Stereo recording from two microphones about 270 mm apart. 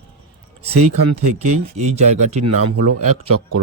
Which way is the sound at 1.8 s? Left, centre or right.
Right.